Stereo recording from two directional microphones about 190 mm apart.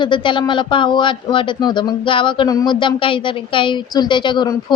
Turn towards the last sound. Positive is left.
turn(degrees=25)  # may be behind; listen again after turning